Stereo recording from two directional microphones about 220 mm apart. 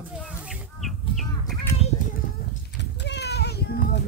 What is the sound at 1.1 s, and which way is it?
Bird, centre (ahead or behind).